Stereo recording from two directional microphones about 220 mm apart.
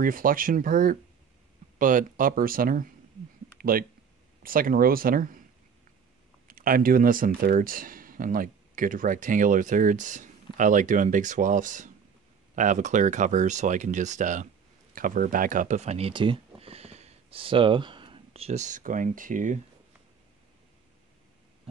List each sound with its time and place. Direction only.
0.0 s speech: 40° right (ahead or behind)
3.5 s a sound: 40° right (ahead or behind)
4.4 s speech: 40° right (ahead or behind)
6.4 s speech: 40° right (ahead or behind)